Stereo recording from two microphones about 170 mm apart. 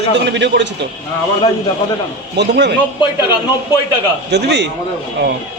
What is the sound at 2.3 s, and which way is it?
Speech, 85° right.